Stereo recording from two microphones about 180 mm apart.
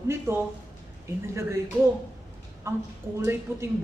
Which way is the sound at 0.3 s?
15° right (ahead or behind).